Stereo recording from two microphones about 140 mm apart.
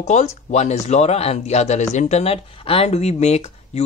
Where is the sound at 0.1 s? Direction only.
55° left (ahead or behind).